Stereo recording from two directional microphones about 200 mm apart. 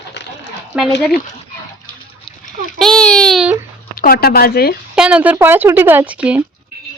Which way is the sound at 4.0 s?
50° left (ahead or behind).